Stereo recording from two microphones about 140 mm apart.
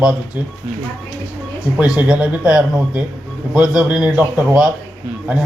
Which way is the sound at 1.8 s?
10° right (ahead or behind).